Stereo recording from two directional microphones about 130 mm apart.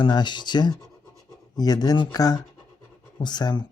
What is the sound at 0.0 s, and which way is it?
Speech, 35° left (ahead or behind).